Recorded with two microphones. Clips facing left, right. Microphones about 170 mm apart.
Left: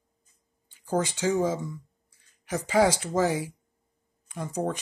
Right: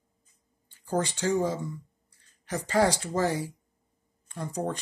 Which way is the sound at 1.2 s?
20° left (ahead or behind).